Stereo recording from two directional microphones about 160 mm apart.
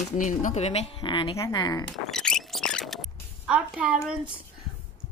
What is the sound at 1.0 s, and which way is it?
Speech, 30° left (ahead or behind).